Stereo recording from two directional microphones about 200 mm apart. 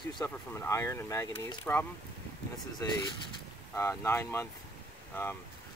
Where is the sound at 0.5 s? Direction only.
15° left (ahead or behind).